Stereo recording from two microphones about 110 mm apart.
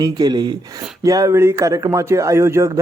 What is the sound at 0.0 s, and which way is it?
Speech, 35° right (ahead or behind).